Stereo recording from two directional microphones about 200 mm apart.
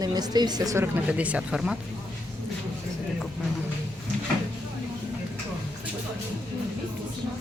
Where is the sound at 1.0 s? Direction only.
5° right (ahead or behind).